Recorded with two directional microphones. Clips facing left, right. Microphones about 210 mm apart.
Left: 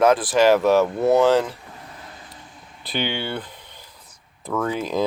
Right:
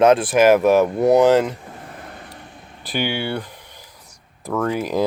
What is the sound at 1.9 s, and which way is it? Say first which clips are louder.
Vehicle: right 5 dB; 55° right (ahead or behind).